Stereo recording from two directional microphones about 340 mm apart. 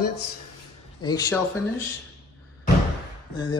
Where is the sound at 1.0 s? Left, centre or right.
Centre.